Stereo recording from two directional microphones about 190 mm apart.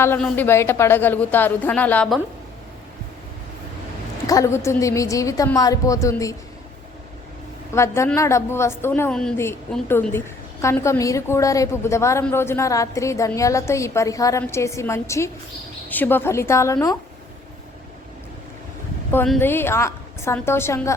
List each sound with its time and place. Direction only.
0.0 s a woman's voice: 10° left (ahead or behind)
4.3 s a woman's voice: 15° left (ahead or behind)
7.7 s a woman's voice: 15° left (ahead or behind)
19.1 s a woman's voice: 10° left (ahead or behind)